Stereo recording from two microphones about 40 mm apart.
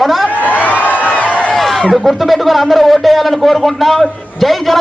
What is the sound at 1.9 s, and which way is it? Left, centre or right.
A man's voice, centre.